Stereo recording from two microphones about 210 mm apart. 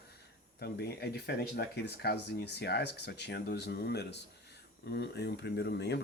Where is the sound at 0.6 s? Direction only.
50° left (ahead or behind).